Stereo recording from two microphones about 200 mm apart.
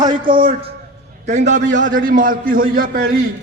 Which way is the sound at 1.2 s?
35° right (ahead or behind).